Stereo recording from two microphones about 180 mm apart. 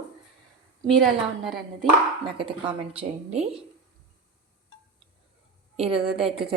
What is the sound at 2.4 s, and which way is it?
Speech, 30° right (ahead or behind).